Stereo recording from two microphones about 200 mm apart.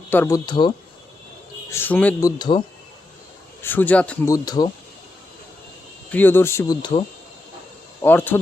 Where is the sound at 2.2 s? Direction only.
20° left (ahead or behind).